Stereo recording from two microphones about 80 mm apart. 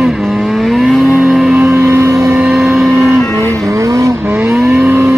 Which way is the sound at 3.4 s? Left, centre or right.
Right.